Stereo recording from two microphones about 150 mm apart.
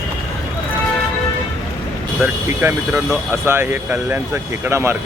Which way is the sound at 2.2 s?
15° right (ahead or behind).